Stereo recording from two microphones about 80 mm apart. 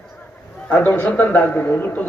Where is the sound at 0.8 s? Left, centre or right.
Left.